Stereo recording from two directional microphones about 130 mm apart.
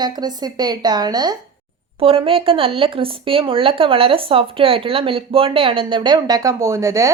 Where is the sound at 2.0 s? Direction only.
45° right (ahead or behind).